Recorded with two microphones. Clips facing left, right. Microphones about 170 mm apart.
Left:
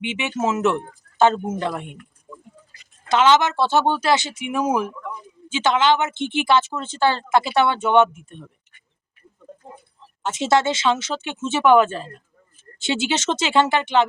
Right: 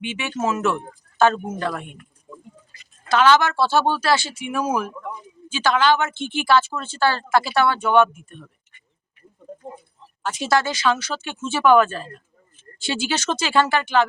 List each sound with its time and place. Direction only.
0.0 s speech: 20° left (ahead or behind)
3.1 s speech: 20° left (ahead or behind)
10.2 s speech: 20° left (ahead or behind)